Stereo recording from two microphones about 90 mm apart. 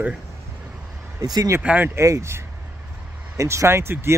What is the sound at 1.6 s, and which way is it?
Speech, 15° right (ahead or behind).